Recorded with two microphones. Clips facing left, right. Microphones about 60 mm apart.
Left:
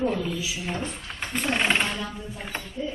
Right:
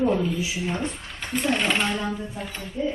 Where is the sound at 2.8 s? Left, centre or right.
Right.